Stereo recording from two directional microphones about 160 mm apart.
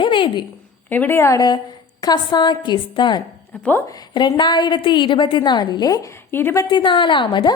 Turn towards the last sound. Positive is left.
turn(degrees=30)  # may be behind; listen again after turning